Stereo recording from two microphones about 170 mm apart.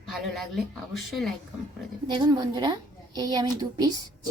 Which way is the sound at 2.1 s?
25° right (ahead or behind).